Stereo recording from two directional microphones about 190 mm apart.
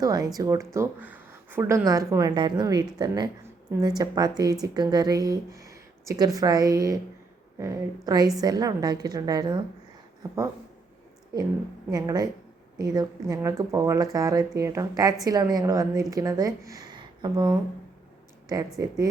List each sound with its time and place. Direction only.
0.0 s a woman's voice: 20° right (ahead or behind)
11.9 s a woman's voice: 20° right (ahead or behind)